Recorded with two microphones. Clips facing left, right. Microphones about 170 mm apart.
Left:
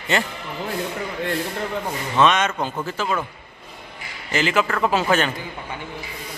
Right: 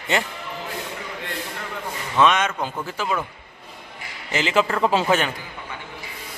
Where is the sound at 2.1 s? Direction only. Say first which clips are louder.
Even; 5° right (ahead or behind).